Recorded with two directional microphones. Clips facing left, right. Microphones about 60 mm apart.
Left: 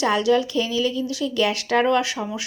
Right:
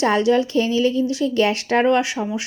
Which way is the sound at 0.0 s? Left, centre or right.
Right.